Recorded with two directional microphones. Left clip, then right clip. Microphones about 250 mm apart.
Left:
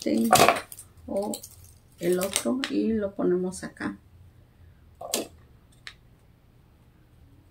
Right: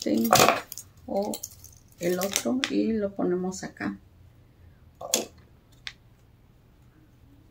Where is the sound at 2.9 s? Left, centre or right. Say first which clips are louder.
Left 2 dB; centre.